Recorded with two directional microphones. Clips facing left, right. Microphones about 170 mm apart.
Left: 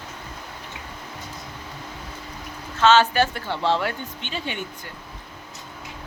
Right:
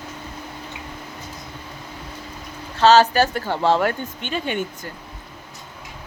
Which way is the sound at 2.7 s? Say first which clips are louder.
Right 3 dB; 40° right (ahead or behind).